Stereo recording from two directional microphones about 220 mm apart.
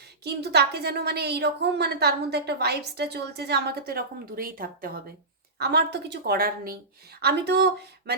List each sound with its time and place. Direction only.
0.3 s a woman's voice: 50° right (ahead or behind)